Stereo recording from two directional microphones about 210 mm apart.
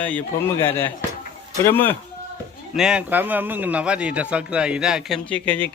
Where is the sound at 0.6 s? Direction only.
10° left (ahead or behind).